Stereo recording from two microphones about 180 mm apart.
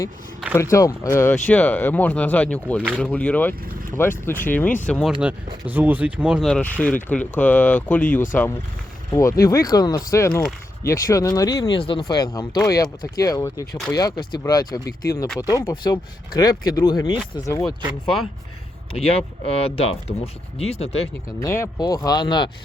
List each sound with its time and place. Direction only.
0.5 s speech: 15° left (ahead or behind)
5.6 s speech: 10° right (ahead or behind); by 8.2 s 10° left (ahead or behind)
9.5 s speech: 20° left (ahead or behind)
18.9 s speech: 35° left (ahead or behind)
21.4 s speech: 15° left (ahead or behind)